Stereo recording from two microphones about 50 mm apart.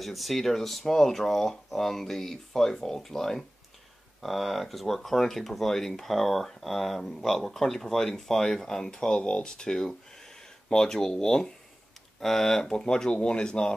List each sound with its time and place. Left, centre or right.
0.0 s speech: centre